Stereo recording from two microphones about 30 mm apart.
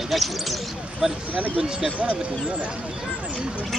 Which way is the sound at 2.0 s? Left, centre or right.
Right.